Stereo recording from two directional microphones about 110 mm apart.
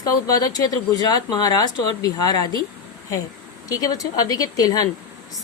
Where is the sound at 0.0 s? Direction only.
35° left (ahead or behind).